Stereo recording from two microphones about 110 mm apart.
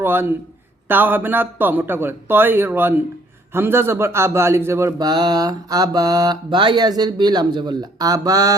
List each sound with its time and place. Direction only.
0.0 s a man's voice: 20° right (ahead or behind)
5.0 s mantra: 40° right (ahead or behind)